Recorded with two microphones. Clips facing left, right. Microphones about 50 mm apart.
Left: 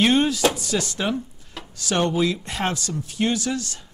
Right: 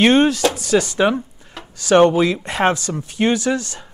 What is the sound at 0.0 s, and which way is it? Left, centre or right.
Speech, right.